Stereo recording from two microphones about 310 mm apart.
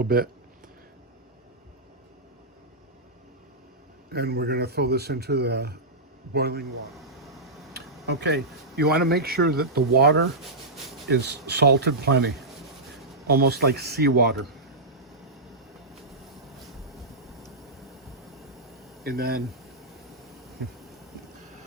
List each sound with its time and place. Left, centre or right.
0.0 s speech: right
4.1 s speech: right
6.9 s air conditioning: centre
8.0 s speech: right
19.0 s speech: right